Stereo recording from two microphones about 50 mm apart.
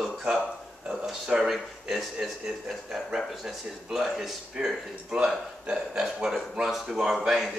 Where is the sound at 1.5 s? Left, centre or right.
Centre.